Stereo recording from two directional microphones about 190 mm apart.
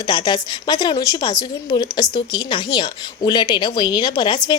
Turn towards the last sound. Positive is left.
turn(degrees=25)  # may be behind; listen again after turning